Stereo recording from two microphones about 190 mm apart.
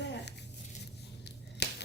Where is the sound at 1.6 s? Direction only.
60° left (ahead or behind).